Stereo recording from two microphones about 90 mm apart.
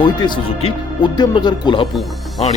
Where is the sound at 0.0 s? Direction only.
60° left (ahead or behind); by 1.1 s 85° left.